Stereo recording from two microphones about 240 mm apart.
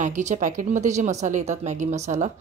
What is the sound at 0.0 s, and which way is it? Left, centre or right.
A woman's voice, right.